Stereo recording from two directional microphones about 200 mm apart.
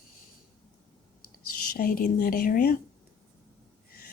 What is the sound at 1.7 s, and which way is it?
A woman's voice, 45° left (ahead or behind).